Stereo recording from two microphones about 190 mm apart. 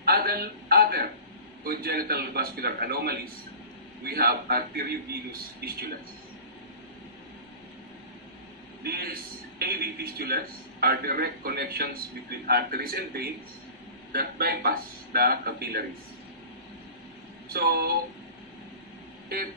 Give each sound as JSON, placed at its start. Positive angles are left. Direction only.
{"t": 0.0, "sound": "a sound", "side_deg": -55}
{"t": 1.6, "sound": "a man's voice", "side_deg": -55}
{"t": 8.8, "sound": "a man's voice", "side_deg": -55}
{"t": 17.5, "sound": "a man's voice", "side_deg": -50}